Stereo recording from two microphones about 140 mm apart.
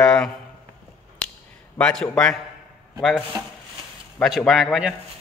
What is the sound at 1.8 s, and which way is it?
Speech, 5° left (ahead or behind).